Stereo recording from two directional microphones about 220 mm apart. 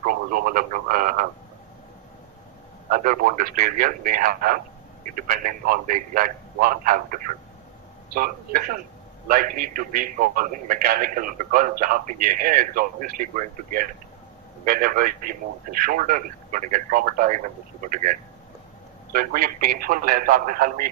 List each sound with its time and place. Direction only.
0.0 s speech: 40° right (ahead or behind)
2.9 s a man's voice: 35° right (ahead or behind)